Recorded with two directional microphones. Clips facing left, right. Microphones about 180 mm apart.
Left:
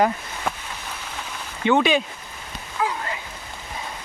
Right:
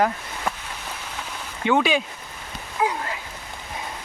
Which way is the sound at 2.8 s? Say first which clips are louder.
Right 2 dB; 15° right (ahead or behind).